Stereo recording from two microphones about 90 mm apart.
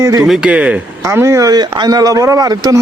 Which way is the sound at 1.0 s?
35° right (ahead or behind).